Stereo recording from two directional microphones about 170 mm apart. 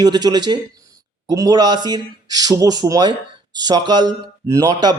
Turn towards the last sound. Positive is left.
turn(degrees=-25)  # may be behind; listen again after turning